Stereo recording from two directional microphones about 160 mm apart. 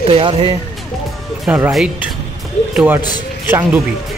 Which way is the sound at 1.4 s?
5° right (ahead or behind).